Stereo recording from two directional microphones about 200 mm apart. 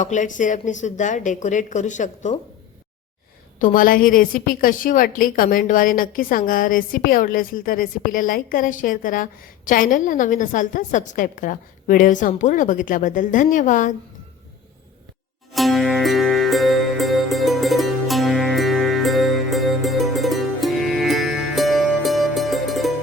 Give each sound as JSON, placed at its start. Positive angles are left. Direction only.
{"t": 0.0, "sound": "speech", "side_deg": 40}
{"t": 3.6, "sound": "a woman's voice", "side_deg": 45}
{"t": 15.5, "sound": "music", "side_deg": 0}